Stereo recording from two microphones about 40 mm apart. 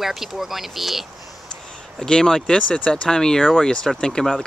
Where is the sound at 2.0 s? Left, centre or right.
Centre.